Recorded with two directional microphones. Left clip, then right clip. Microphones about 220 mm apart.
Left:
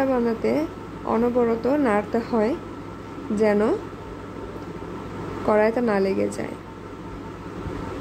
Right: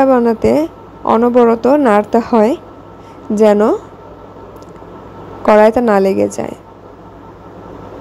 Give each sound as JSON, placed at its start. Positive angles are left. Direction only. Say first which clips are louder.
{"t": 0.0, "sound": "a woman's voice", "louder": "right 12 dB", "side_deg": -35}
{"t": 5.5, "sound": "a woman's voice", "louder": "right 12 dB", "side_deg": -35}